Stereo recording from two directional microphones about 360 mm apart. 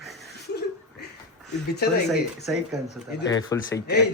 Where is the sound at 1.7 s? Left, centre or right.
Left.